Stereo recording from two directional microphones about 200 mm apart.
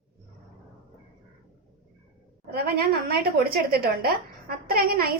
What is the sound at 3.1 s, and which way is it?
A woman's voice, 50° right (ahead or behind).